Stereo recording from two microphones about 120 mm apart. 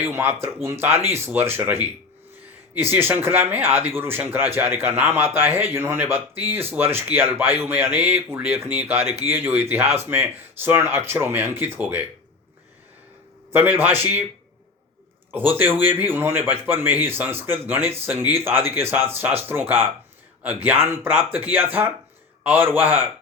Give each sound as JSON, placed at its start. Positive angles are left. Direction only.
{"t": 0.0, "sound": "a man's voice", "side_deg": -20}
{"t": 13.5, "sound": "a man's voice", "side_deg": -15}
{"t": 15.3, "sound": "a man's voice", "side_deg": -15}